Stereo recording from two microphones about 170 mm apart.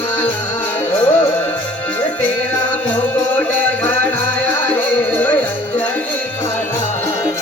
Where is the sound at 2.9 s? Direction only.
10° left (ahead or behind).